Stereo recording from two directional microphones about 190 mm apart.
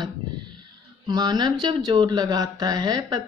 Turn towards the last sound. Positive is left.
turn(degrees=-20)  # may be behind; listen again after turning